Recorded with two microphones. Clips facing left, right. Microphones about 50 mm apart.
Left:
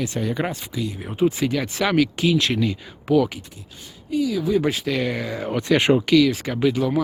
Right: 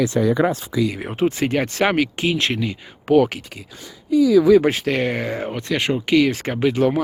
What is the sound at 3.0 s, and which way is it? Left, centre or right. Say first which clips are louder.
Speech: right 3 dB; right.